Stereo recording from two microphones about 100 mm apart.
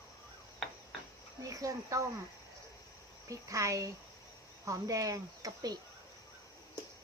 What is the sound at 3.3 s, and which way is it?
Speech, 35° right (ahead or behind).